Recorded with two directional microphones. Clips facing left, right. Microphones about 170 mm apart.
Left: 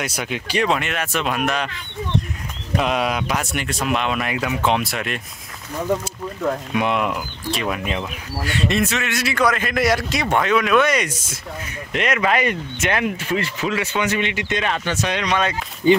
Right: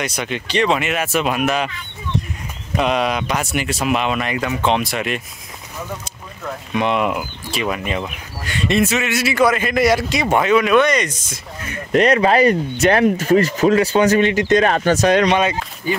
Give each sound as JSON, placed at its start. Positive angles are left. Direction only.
{"t": 0.0, "sound": "speech", "side_deg": 5}
{"t": 0.7, "sound": "speech", "side_deg": -5}
{"t": 2.8, "sound": "speech", "side_deg": 0}
{"t": 6.7, "sound": "speech", "side_deg": 5}
{"t": 11.9, "sound": "speech", "side_deg": -35}
{"t": 15.8, "sound": "speech", "side_deg": 25}